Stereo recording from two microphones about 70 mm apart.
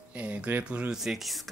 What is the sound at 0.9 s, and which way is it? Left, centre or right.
Speech, centre.